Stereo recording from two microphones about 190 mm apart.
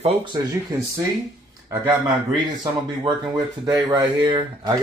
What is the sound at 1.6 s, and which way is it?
A man's voice, 15° right (ahead or behind).